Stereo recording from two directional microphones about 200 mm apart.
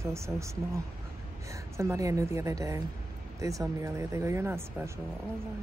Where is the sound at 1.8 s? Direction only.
15° right (ahead or behind).